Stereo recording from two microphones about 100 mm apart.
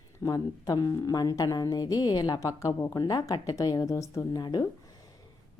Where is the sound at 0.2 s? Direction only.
40° left (ahead or behind).